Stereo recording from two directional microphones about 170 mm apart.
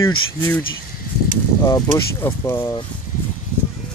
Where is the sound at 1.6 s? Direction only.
20° left (ahead or behind).